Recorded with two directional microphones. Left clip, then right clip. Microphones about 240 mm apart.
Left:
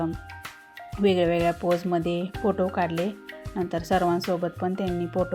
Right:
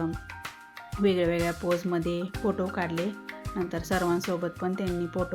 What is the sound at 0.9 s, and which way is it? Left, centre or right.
Speech, centre.